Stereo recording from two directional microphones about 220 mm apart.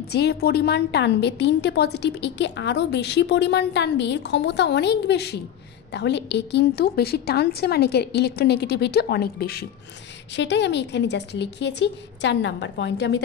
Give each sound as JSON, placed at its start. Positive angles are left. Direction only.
{"t": 0.1, "sound": "a woman's voice", "side_deg": 45}